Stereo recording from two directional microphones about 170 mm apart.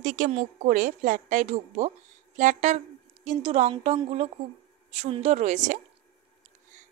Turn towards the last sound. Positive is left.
turn(degrees=-45)  # may be behind; listen again after turning